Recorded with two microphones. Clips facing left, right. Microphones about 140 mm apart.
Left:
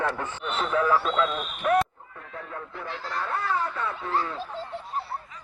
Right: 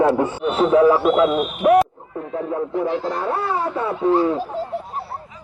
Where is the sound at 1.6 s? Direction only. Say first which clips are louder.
Right 9 dB; 30° right (ahead or behind).